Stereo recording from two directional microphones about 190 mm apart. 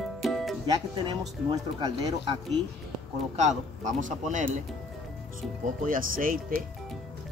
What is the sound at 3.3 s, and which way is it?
Speech, 40° right (ahead or behind).